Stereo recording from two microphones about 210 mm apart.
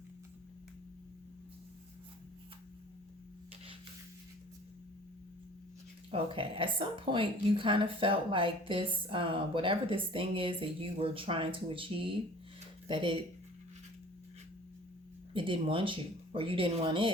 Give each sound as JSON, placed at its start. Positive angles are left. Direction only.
{"t": 6.1, "sound": "a woman's voice", "side_deg": -25}
{"t": 15.3, "sound": "a woman's voice", "side_deg": -25}